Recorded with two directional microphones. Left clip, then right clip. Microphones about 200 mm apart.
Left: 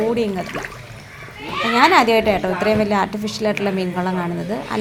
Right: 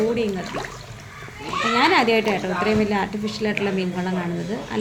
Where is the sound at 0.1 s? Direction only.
20° left (ahead or behind).